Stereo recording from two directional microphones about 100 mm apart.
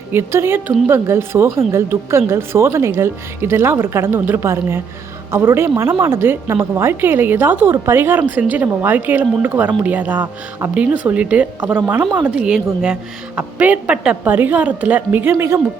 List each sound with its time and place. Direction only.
0.1 s a woman's voice: 25° right (ahead or behind)